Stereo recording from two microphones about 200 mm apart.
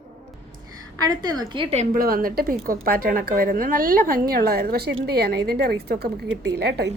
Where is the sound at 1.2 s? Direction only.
20° right (ahead or behind).